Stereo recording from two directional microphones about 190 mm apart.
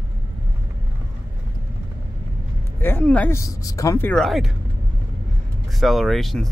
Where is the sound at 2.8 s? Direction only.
10° left (ahead or behind).